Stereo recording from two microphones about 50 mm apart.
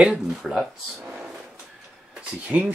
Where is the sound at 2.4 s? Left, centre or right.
Right.